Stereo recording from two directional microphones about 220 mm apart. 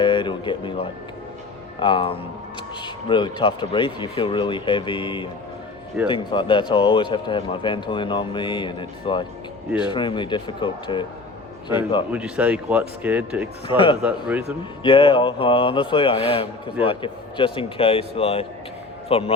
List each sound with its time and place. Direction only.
0.0 s a sound: 20° left (ahead or behind)
1.8 s speech: 25° left (ahead or behind)
12.1 s speech: 5° right (ahead or behind)
13.7 s speech: 25° left (ahead or behind)
14.0 s speech: 5° right (ahead or behind)
14.8 s speech: 25° left (ahead or behind)